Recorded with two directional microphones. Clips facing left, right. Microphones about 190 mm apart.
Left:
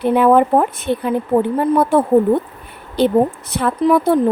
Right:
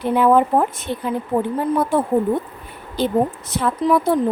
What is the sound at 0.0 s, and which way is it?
A woman's voice, 60° left (ahead or behind).